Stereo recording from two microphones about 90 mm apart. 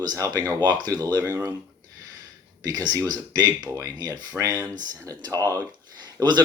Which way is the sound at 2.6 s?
50° right (ahead or behind).